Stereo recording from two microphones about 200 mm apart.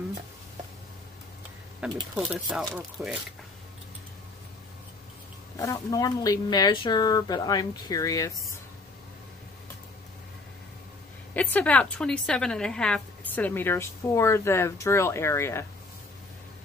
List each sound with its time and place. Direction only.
1.8 s speech: 5° right (ahead or behind)
5.6 s speech: 15° left (ahead or behind)
11.3 s a woman's voice: 5° left (ahead or behind)